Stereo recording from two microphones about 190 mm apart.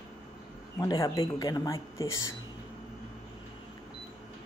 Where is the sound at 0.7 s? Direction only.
20° left (ahead or behind).